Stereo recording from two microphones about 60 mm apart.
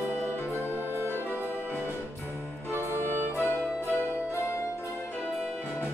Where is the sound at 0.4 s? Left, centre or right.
Left.